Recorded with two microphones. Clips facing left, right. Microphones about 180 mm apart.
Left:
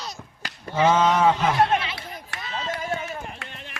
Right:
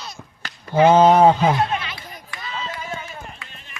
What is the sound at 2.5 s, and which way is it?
Run, 45° left (ahead or behind).